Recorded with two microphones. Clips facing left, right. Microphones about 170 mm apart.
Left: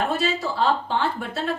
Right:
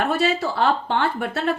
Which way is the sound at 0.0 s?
65° right (ahead or behind).